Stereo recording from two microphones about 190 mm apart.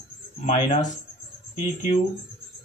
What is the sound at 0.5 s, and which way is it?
Speech, 40° left (ahead or behind).